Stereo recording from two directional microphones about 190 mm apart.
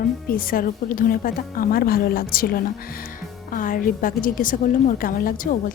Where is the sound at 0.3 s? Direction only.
50° left (ahead or behind).